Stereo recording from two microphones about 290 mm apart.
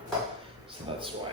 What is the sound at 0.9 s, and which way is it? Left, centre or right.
Speech, centre.